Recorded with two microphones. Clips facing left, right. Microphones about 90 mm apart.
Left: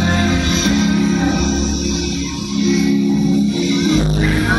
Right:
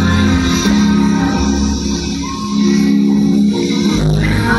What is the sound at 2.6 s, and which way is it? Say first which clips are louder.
Music: right 3 dB; 55° right (ahead or behind).